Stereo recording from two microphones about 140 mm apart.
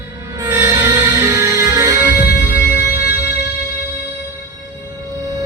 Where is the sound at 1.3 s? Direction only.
20° right (ahead or behind).